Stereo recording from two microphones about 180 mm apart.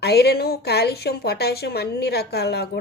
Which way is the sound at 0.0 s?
65° left (ahead or behind).